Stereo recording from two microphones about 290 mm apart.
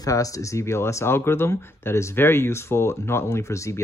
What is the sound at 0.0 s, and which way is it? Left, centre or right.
Speech, centre.